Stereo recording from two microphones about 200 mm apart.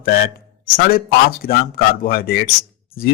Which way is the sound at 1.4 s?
50° left (ahead or behind).